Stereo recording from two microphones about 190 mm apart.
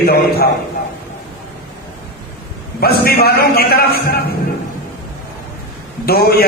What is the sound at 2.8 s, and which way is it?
A man's voice, 55° left (ahead or behind).